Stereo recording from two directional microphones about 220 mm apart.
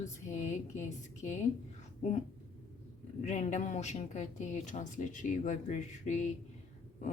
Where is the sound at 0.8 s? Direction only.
35° left (ahead or behind).